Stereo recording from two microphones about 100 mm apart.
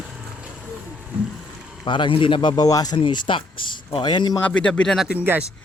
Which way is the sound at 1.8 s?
55° left (ahead or behind).